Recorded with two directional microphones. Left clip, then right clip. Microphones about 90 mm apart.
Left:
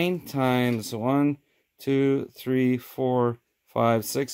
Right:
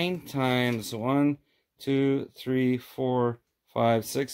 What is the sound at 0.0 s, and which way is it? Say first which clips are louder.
Speech: left 3 dB; 45° left (ahead or behind).